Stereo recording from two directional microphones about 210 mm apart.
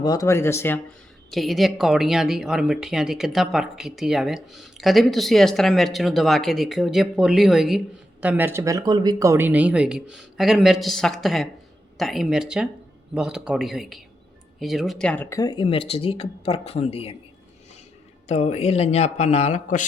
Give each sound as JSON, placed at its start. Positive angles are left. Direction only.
{"t": 0.0, "sound": "speech", "side_deg": 15}
{"t": 1.3, "sound": "speech", "side_deg": 0}
{"t": 18.3, "sound": "speech", "side_deg": 30}